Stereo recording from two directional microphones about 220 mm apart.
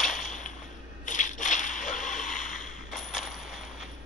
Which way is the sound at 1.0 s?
35° left (ahead or behind).